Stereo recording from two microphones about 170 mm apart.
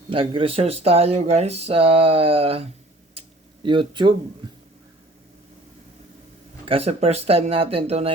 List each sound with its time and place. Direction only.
0.1 s speech: 30° right (ahead or behind)
3.2 s a sound: 30° right (ahead or behind)
6.7 s speech: 35° right (ahead or behind)